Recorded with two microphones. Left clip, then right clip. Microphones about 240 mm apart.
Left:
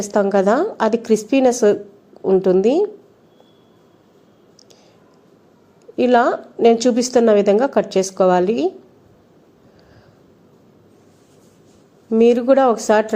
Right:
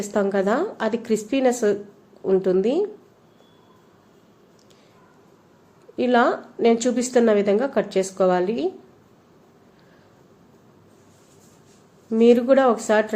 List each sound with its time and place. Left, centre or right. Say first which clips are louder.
0.0 s a woman's voice: left 6 dB; centre
6.0 s a woman's voice: left 4 dB; centre
12.1 s a woman's voice: left 3 dB; centre